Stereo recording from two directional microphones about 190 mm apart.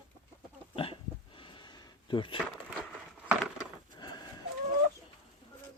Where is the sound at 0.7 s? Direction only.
25° left (ahead or behind).